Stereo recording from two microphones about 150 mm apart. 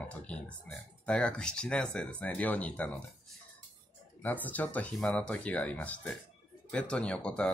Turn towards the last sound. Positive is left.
turn(degrees=5)  # may be behind; listen again after turning